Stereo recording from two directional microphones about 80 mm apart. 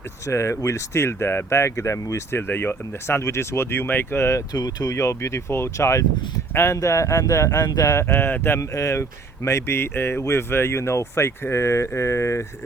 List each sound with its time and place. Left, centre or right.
0.3 s speech: left
2.5 s speech: left
4.5 s speech: left
8.0 s speech: left
8.6 s speech: left